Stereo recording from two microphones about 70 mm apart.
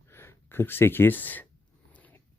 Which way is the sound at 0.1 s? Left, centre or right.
Left.